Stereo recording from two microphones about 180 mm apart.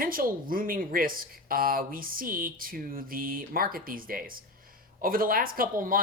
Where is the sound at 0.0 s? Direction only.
50° right (ahead or behind).